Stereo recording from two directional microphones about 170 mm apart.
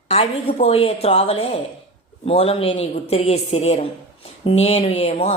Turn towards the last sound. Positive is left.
turn(degrees=35)  # may be behind; listen again after turning